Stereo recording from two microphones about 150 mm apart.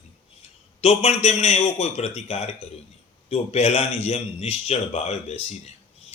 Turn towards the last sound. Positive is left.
turn(degrees=45)  # may be behind; listen again after turning